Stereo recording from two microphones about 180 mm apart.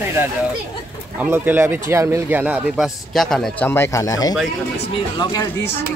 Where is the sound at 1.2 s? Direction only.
10° right (ahead or behind); by 5.7 s 20° left (ahead or behind).